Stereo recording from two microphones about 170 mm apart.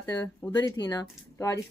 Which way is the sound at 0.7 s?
25° left (ahead or behind).